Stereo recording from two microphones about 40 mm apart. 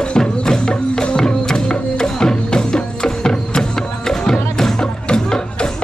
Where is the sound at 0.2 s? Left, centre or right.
Centre.